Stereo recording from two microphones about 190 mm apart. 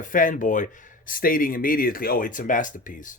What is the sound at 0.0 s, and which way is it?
Speech, 45° left (ahead or behind).